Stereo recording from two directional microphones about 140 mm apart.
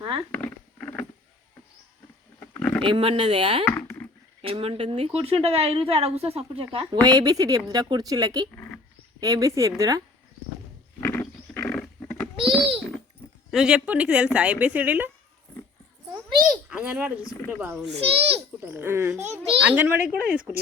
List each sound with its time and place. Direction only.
0.3 s patter: 15° left (ahead or behind)
2.4 s roaring cats: 10° left (ahead or behind)
2.8 s speech: 40° right (ahead or behind)
3.7 s a sound: 15° left (ahead or behind)
4.4 s a woman's voice: 45° right (ahead or behind); by 8.4 s 25° right (ahead or behind)
8.5 s a sound: 15° left (ahead or behind)
9.2 s speech: 25° right (ahead or behind)
11.0 s a sound: 15° left (ahead or behind)
13.5 s speech: 5° right (ahead or behind)
16.6 s speech: 10° right (ahead or behind)
17.9 s a woman's voice: 45° right (ahead or behind)
18.6 s speech: 15° right (ahead or behind)